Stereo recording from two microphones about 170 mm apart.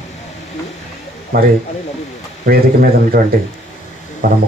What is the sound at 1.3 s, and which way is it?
Speech, 60° right (ahead or behind).